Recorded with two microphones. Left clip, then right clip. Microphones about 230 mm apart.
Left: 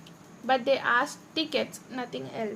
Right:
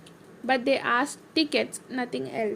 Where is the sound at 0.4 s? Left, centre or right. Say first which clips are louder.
Even; right.